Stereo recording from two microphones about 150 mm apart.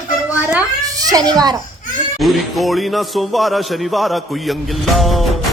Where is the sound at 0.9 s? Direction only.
25° right (ahead or behind).